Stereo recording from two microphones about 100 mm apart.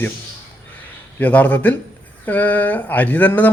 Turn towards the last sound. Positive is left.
turn(degrees=15)  # may be behind; listen again after turning